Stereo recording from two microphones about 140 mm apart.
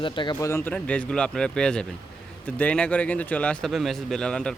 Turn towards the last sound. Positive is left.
turn(degrees=5)  # may be behind; listen again after turning